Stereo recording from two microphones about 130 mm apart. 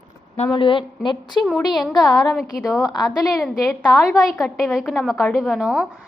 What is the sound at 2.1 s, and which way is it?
Speech, 30° left (ahead or behind).